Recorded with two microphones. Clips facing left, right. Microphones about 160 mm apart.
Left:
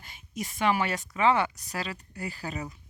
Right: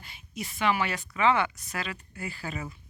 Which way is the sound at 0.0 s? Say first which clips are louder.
Left 2 dB; 45° left (ahead or behind).